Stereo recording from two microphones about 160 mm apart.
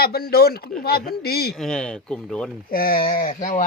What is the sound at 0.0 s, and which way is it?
Speech, 75° left (ahead or behind).